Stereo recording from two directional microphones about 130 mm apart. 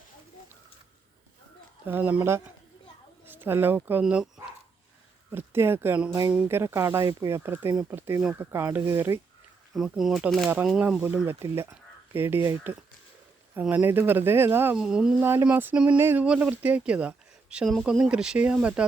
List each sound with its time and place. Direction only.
1.9 s speech: 15° right (ahead or behind)
4.0 s speech: 5° right (ahead or behind)
5.3 s speech: 15° right (ahead or behind)
9.7 s speech: 5° right (ahead or behind)